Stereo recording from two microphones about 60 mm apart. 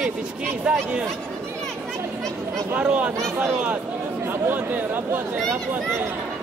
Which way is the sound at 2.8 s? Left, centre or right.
Centre.